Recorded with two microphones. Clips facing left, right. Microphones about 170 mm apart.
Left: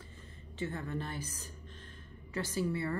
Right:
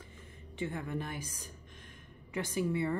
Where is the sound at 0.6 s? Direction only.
15° right (ahead or behind).